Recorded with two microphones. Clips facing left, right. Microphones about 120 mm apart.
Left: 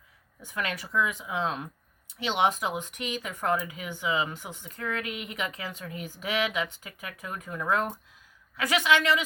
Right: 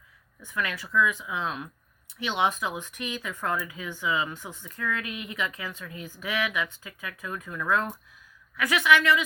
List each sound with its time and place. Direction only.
0.4 s speech: 25° left (ahead or behind)